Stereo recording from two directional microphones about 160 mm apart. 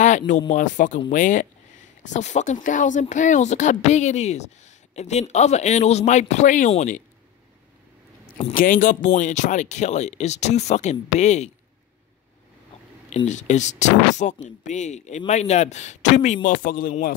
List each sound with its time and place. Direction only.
0.5 s speech: 50° left (ahead or behind)
8.5 s speech: 55° left (ahead or behind)
13.1 s speech: 45° left (ahead or behind)
16.4 s speech: 65° left (ahead or behind)